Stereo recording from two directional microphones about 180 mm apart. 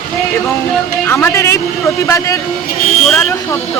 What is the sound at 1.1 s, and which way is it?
Speech, 15° left (ahead or behind).